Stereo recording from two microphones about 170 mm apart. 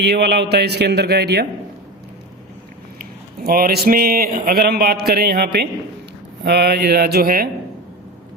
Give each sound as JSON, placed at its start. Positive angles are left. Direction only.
{"t": 0.0, "sound": "a man's voice", "side_deg": -75}
{"t": 3.0, "sound": "a man's voice", "side_deg": -60}